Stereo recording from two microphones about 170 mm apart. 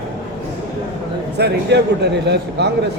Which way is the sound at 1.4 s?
75° right (ahead or behind).